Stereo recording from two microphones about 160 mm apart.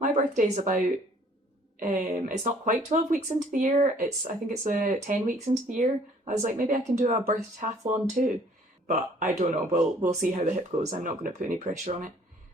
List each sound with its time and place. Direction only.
0.0 s speech: 50° right (ahead or behind)
1.8 s speech: 50° right (ahead or behind)